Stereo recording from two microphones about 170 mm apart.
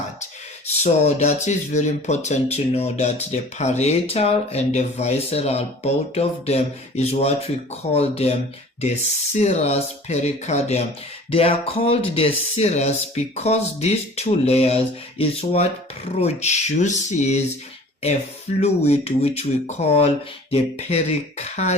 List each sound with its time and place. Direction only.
0.8 s speech: 40° left (ahead or behind)
18.6 s speech: 40° left (ahead or behind)